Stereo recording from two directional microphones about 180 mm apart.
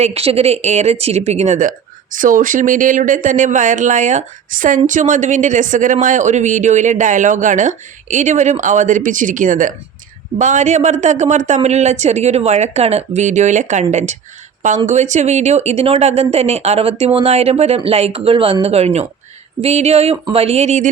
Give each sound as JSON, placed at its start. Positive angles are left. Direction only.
{"t": 0.0, "sound": "speech", "side_deg": -35}